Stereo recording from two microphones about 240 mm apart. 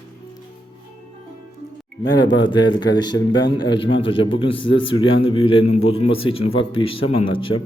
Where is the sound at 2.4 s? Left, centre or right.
Centre.